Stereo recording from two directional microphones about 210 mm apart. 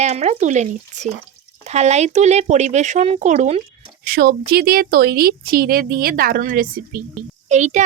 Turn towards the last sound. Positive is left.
turn(degrees=-35)  # may be behind; listen again after turning